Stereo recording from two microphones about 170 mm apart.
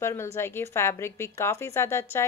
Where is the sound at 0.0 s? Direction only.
15° left (ahead or behind).